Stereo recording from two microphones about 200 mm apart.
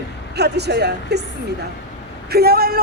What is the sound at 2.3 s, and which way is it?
Speech, 50° right (ahead or behind).